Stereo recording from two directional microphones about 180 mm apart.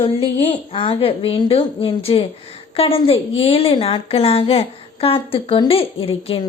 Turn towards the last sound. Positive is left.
turn(degrees=30)  # may be behind; listen again after turning